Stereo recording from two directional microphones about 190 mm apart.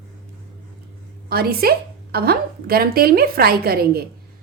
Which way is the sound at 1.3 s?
55° right (ahead or behind).